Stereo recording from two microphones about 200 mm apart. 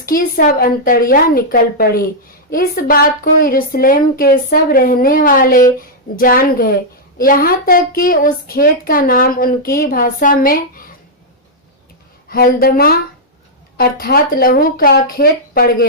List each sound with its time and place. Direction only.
0.0 s a woman's voice: 45° left (ahead or behind)
12.3 s a woman's voice: 45° left (ahead or behind)